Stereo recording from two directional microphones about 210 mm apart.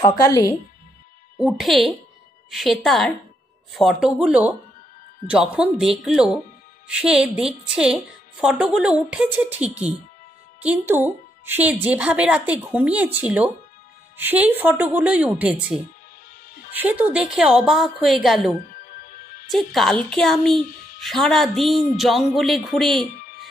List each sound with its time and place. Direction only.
0.2 s speech: 15° left (ahead or behind)
1.4 s a woman's voice: centre (ahead or behind)
18.7 s music: 40° left (ahead or behind)
19.5 s a woman's voice: centre (ahead or behind)